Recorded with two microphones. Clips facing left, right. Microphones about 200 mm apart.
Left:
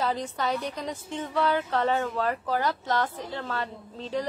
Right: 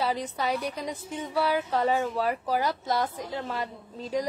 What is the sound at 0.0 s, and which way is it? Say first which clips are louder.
A woman's voice: even; 10° right (ahead or behind).